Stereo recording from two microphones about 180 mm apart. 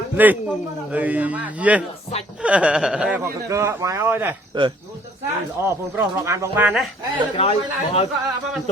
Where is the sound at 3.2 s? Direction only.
15° right (ahead or behind).